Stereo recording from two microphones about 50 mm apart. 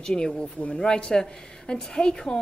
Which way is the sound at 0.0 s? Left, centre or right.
Centre.